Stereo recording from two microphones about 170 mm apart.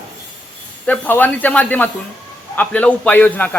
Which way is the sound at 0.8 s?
10° left (ahead or behind).